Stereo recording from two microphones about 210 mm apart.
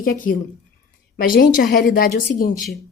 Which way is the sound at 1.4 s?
40° left (ahead or behind).